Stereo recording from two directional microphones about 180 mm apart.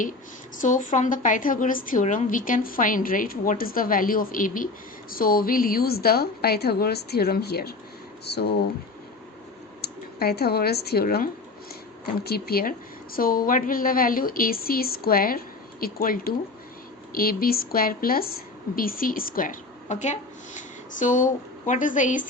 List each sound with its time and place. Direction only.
0.6 s a woman's voice: 45° left (ahead or behind); by 8.5 s 65° left (ahead or behind)
9.8 s a woman's voice: 60° left (ahead or behind); by 22.3 s 45° left (ahead or behind)